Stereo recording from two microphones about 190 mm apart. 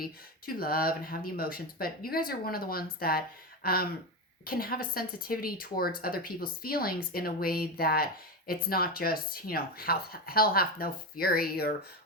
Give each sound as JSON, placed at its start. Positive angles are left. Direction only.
{"t": 0.0, "sound": "speech", "side_deg": 50}